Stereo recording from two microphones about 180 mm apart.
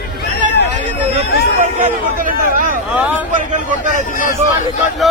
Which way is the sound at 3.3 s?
45° right (ahead or behind).